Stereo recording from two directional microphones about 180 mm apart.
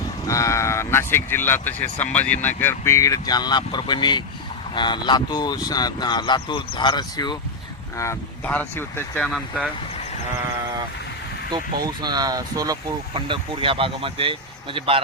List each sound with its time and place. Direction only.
0.3 s speech: 15° left (ahead or behind)
11.5 s speech: 25° right (ahead or behind)